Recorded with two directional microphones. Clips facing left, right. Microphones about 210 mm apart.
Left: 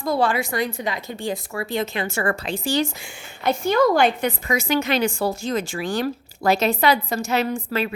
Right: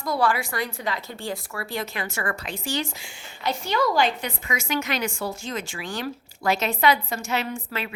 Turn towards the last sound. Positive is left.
turn(degrees=35)  # may be behind; listen again after turning